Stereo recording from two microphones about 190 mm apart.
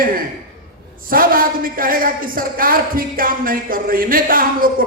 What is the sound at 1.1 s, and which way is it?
Speech, 50° right (ahead or behind).